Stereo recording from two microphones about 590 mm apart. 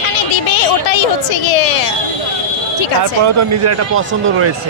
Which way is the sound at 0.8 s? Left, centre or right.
Left.